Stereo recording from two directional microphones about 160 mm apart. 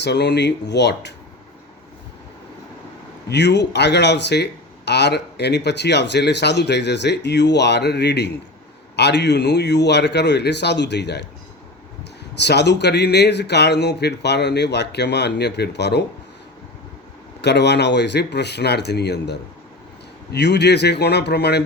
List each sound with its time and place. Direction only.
0.0 s speech: 90° left
3.2 s speech: 90° left
12.4 s speech: 90° left
17.4 s speech: 90° left